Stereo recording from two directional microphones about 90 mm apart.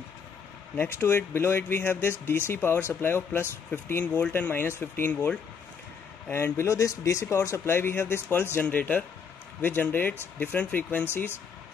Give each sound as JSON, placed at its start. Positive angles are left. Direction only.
{"t": 0.7, "sound": "speech", "side_deg": 25}
{"t": 4.0, "sound": "speech", "side_deg": 15}
{"t": 6.3, "sound": "speech", "side_deg": 30}